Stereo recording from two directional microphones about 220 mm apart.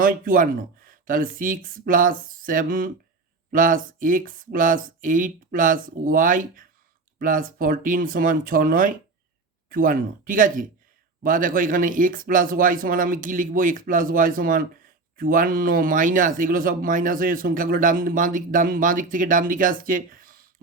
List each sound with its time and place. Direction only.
0.0 s speech: 40° right (ahead or behind)